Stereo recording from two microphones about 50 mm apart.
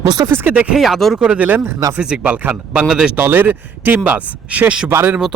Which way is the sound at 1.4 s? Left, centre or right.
Right.